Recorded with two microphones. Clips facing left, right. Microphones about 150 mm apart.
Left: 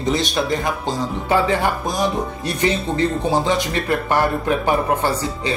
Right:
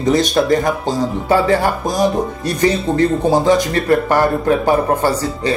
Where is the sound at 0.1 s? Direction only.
45° right (ahead or behind).